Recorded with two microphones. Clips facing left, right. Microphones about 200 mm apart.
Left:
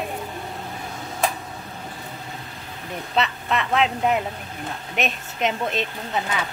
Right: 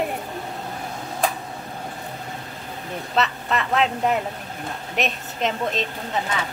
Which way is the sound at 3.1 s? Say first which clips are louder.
Even; centre (ahead or behind).